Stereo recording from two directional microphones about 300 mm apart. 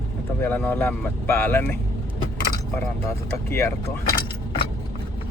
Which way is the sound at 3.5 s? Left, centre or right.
Centre.